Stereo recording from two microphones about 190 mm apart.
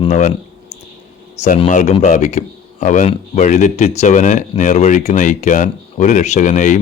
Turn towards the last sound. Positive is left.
turn(degrees=40)  # may be behind; listen again after turning